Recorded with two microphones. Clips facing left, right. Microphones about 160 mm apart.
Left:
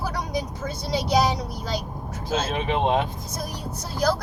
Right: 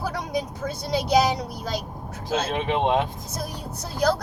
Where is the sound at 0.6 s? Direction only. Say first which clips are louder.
Right 1 dB; 60° right (ahead or behind).